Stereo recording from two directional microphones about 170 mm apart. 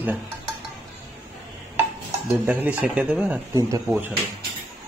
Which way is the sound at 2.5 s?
10° right (ahead or behind).